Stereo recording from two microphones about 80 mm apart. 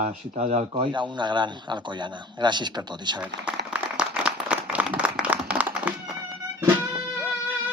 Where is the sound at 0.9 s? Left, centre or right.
Right.